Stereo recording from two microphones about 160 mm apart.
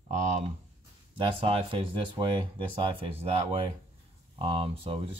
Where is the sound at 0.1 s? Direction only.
50° right (ahead or behind).